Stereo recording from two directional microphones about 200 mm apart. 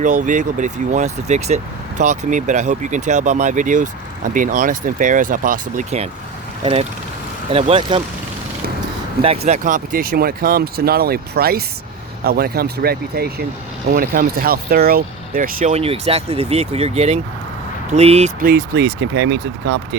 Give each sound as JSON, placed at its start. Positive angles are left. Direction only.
{"t": 0.0, "sound": "speech", "side_deg": -40}
{"t": 6.6, "sound": "speech", "side_deg": -25}
{"t": 9.5, "sound": "speech", "side_deg": -40}
{"t": 18.3, "sound": "speech", "side_deg": -50}